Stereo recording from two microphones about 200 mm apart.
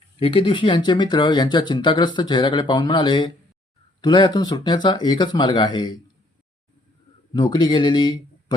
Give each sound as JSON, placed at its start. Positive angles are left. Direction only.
{"t": 0.2, "sound": "speech", "side_deg": 25}
{"t": 7.3, "sound": "speech", "side_deg": 25}